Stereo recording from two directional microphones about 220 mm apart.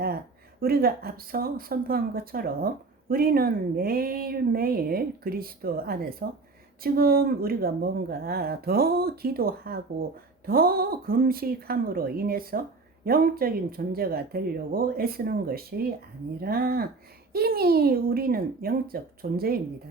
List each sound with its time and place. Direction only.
0.6 s speech: 45° right (ahead or behind)